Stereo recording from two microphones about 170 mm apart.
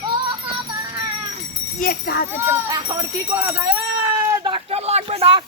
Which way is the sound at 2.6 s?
20° right (ahead or behind).